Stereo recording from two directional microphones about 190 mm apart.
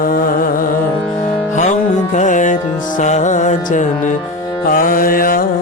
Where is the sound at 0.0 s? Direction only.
50° left (ahead or behind).